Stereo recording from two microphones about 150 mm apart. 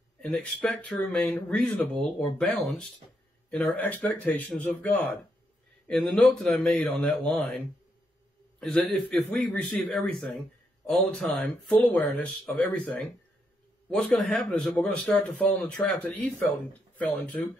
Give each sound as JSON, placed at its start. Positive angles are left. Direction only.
{"t": 0.2, "sound": "a man's voice", "side_deg": 10}